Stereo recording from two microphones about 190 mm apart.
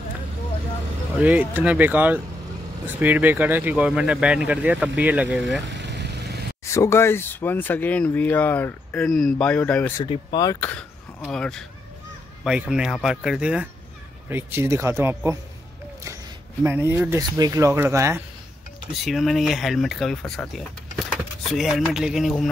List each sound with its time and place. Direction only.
1.2 s speech: 10° right (ahead or behind)
5.7 s vehicle: 65° right (ahead or behind)
6.7 s speech: 15° left (ahead or behind)
9.9 s speech: 20° left (ahead or behind); by 15.3 s 15° right (ahead or behind)
16.6 s speech: 10° right (ahead or behind)
19.0 s speech: centre (ahead or behind)